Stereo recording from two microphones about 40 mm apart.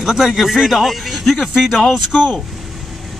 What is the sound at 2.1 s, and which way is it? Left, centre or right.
Speech, centre.